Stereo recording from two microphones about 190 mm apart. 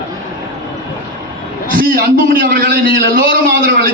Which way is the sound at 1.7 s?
50° right (ahead or behind).